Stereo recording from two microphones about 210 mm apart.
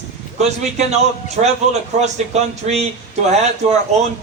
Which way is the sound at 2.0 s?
30° right (ahead or behind).